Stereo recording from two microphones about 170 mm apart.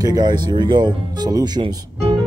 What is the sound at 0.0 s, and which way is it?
Speech, 25° right (ahead or behind).